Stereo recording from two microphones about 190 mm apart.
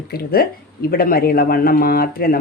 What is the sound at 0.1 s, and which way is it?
A woman's voice, 55° left (ahead or behind).